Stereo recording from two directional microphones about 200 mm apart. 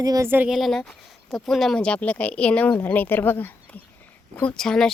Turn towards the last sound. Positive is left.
turn(degrees=0)  # may be behind; listen again after turning